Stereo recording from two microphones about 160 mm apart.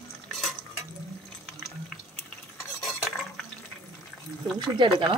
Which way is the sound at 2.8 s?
Centre (ahead or behind).